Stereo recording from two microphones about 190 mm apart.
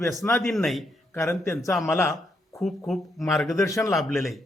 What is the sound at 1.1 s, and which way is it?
Speech, 15° left (ahead or behind).